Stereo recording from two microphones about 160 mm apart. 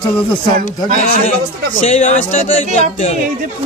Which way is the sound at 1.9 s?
45° left (ahead or behind).